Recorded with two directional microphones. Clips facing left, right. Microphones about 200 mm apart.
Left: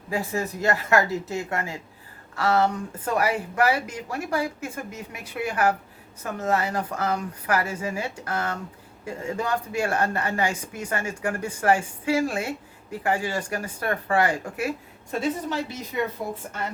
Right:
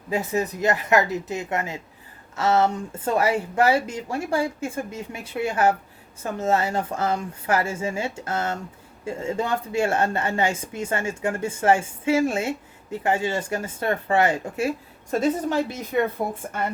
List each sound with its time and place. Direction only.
0.1 s a woman's voice: 20° right (ahead or behind)
15.1 s a woman's voice: 45° right (ahead or behind)